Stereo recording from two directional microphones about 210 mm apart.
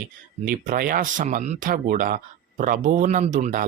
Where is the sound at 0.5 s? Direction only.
40° right (ahead or behind).